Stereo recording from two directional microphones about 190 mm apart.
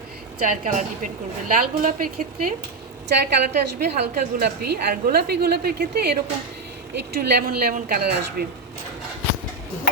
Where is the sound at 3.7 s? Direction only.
55° right (ahead or behind).